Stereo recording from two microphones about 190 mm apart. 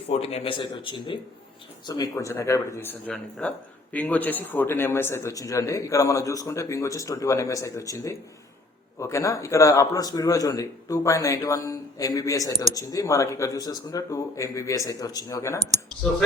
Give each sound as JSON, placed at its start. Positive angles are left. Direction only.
{"t": 0.1, "sound": "a man's voice", "side_deg": 35}